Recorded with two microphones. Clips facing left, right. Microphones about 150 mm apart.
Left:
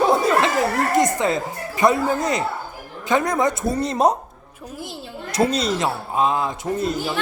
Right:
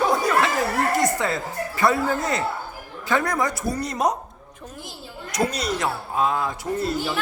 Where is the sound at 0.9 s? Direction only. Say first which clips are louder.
Left 4 dB; 20° left (ahead or behind).